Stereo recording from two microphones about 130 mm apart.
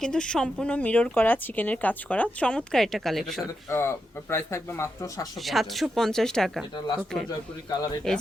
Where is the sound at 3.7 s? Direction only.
20° left (ahead or behind).